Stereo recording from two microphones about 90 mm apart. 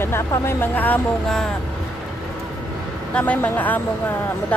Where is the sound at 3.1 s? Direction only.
20° left (ahead or behind).